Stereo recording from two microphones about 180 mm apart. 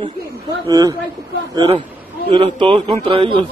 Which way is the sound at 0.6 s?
20° right (ahead or behind).